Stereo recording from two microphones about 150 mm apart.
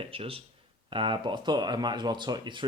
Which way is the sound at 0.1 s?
40° right (ahead or behind).